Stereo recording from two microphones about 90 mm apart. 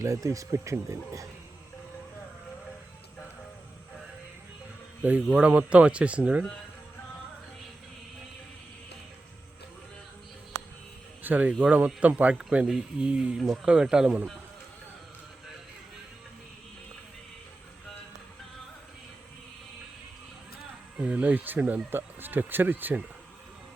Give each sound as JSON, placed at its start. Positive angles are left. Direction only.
{"t": 0.0, "sound": "speech", "side_deg": -40}
{"t": 5.0, "sound": "speech", "side_deg": -15}
{"t": 11.2, "sound": "speech", "side_deg": -20}
{"t": 21.0, "sound": "speech", "side_deg": -15}